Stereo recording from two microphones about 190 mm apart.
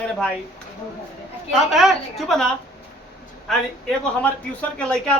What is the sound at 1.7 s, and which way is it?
A man's voice, centre (ahead or behind).